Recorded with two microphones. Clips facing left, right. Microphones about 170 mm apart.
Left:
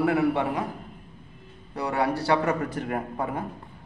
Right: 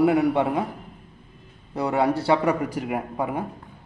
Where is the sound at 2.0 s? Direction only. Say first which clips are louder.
Right 3 dB; 15° right (ahead or behind).